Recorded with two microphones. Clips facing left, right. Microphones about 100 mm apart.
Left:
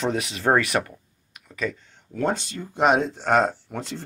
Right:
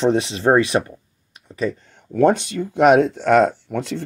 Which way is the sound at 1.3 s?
35° right (ahead or behind).